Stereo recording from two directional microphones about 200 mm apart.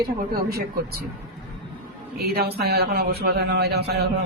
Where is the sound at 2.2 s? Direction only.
50° right (ahead or behind).